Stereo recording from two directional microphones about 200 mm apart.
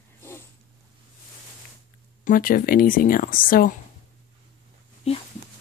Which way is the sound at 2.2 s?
45° left (ahead or behind).